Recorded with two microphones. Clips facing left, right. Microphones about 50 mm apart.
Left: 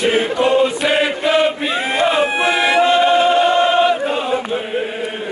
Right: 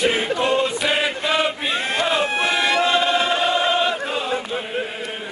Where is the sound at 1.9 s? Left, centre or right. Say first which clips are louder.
Left 6 dB; centre.